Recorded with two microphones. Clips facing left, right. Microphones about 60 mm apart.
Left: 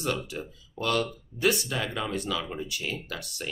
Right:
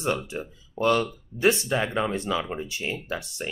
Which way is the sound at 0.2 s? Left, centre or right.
Right.